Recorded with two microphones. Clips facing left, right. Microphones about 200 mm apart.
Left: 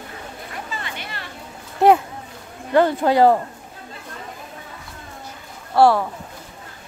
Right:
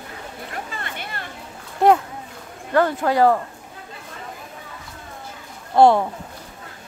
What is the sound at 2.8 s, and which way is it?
Speech, 25° left (ahead or behind).